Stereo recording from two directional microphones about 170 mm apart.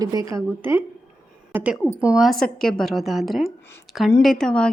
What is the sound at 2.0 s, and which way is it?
A woman's voice, 5° right (ahead or behind).